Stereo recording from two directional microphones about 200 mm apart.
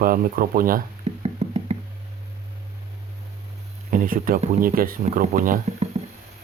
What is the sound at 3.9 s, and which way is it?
Speech, 45° right (ahead or behind).